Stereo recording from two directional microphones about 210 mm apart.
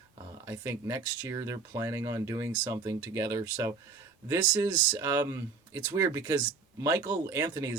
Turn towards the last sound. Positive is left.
turn(degrees=-15)  # may be behind; listen again after turning